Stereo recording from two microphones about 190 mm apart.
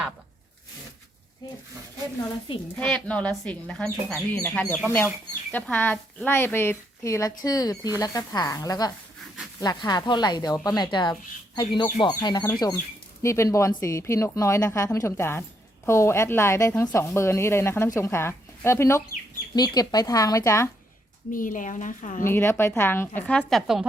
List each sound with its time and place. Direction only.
2.7 s speech: 5° left (ahead or behind)
21.3 s a woman's voice: 45° left (ahead or behind)
22.2 s speech: 10° left (ahead or behind)